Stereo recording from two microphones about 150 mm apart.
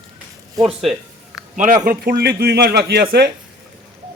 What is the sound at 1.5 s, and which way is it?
Speech, 60° right (ahead or behind).